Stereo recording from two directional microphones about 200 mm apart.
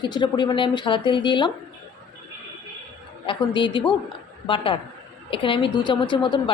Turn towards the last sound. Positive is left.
turn(degrees=25)  # may be behind; listen again after turning